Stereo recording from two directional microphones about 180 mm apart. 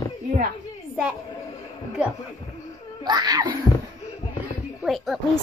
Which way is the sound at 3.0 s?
20° right (ahead or behind).